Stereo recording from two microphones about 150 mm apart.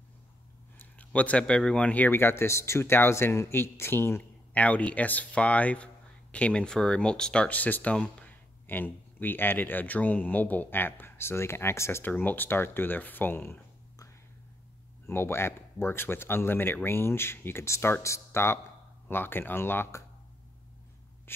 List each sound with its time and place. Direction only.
0.7 s speech: 10° left (ahead or behind)